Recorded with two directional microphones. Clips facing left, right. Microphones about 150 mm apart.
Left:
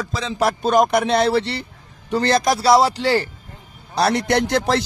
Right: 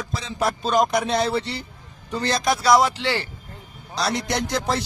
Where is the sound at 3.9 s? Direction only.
60° left (ahead or behind); by 4.8 s 75° left (ahead or behind).